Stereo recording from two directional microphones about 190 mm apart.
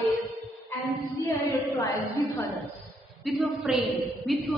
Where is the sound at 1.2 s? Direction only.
15° left (ahead or behind).